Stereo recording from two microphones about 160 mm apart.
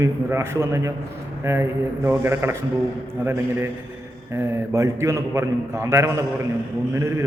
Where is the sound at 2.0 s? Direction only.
15° right (ahead or behind).